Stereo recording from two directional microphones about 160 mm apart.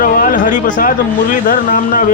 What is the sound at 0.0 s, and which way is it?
Speech, 55° left (ahead or behind).